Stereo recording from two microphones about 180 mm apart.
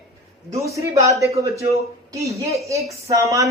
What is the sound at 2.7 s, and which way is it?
Speech, 15° right (ahead or behind).